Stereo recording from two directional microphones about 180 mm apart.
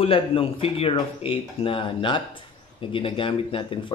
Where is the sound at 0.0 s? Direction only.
30° left (ahead or behind).